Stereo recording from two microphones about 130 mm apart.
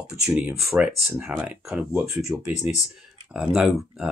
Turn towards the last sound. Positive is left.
turn(degrees=-5)  # may be behind; listen again after turning